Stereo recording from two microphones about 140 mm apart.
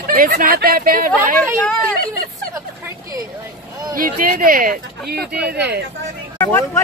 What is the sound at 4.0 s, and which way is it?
Speech, 75° right (ahead or behind).